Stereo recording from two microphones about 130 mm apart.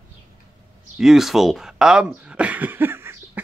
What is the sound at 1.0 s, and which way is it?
Speech, centre (ahead or behind).